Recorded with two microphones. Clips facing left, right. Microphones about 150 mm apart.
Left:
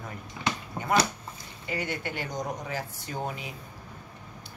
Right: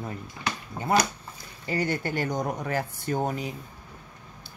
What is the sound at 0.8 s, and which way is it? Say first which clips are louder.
Speech: right 2 dB; 20° left (ahead or behind).